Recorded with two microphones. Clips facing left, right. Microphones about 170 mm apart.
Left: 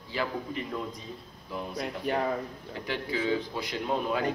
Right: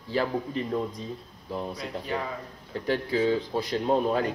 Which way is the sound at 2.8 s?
35° right (ahead or behind).